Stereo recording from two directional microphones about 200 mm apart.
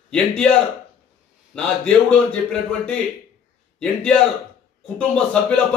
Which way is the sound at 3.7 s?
5° left (ahead or behind).